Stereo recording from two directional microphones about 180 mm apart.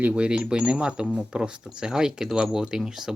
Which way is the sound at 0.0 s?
5° right (ahead or behind).